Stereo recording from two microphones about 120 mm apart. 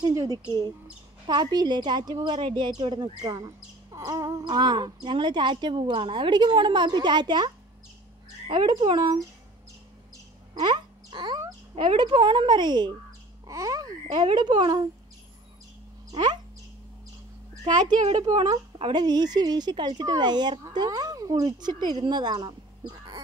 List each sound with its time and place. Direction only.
0.0 s a woman's voice: 30° right (ahead or behind)
10.5 s a sound: 40° right (ahead or behind)
11.7 s a woman's voice: 45° right (ahead or behind)
16.1 s speech: 40° right (ahead or behind)
17.6 s a woman's voice: 35° right (ahead or behind)